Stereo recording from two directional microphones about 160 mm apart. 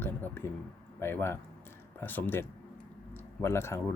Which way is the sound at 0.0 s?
15° left (ahead or behind).